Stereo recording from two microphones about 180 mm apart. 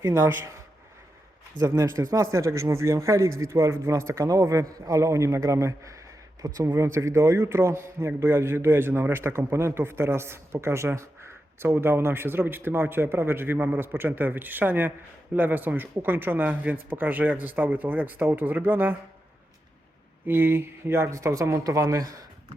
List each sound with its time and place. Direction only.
0.0 s speech: 15° right (ahead or behind)
1.5 s speech: 15° right (ahead or behind)
20.2 s speech: 10° right (ahead or behind)